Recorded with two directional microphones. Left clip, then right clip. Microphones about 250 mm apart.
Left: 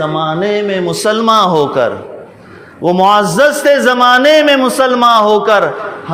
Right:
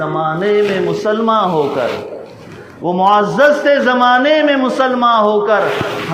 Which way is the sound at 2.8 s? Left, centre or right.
Left.